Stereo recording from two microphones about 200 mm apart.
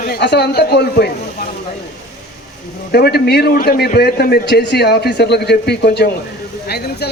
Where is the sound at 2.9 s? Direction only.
50° left (ahead or behind).